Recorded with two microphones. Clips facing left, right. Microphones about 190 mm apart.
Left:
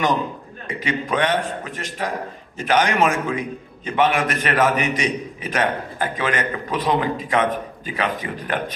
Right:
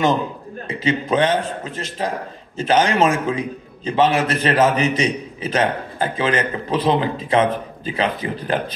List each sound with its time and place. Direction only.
0.7 s a man's voice: 25° right (ahead or behind)